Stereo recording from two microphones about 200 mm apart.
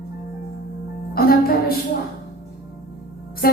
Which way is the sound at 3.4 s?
50° left (ahead or behind).